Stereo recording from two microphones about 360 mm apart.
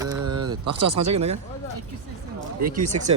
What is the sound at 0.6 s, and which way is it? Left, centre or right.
Speech, right.